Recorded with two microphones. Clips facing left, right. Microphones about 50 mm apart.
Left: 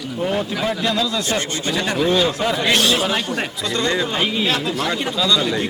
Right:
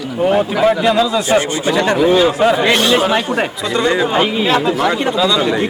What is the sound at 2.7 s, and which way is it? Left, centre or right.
Speech, centre.